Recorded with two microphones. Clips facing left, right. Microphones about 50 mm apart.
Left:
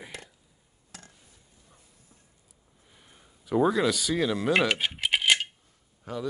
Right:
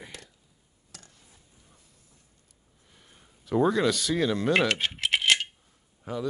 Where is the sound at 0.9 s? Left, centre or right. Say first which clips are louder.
Left 3 dB; left.